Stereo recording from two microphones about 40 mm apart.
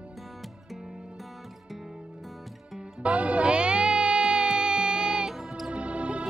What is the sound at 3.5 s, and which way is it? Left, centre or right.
Music, right.